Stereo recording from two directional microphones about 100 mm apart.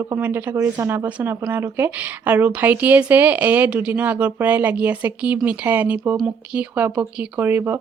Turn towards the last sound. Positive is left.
turn(degrees=-20)  # may be behind; listen again after turning